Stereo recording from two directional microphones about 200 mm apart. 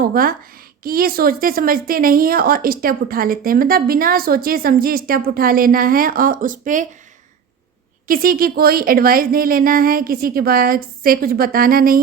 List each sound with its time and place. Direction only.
0.0 s speech: 45° right (ahead or behind)
8.0 s speech: 45° right (ahead or behind)